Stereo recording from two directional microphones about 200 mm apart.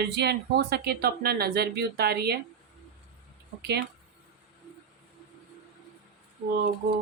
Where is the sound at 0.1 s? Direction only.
55° right (ahead or behind).